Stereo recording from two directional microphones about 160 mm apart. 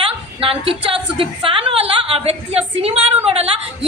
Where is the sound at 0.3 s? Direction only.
35° right (ahead or behind).